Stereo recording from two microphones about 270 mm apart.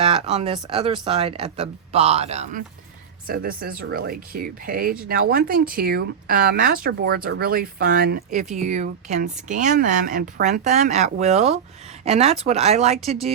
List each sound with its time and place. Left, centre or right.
0.0 s speech: right